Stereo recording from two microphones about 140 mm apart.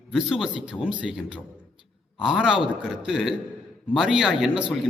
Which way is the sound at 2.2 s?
5° right (ahead or behind).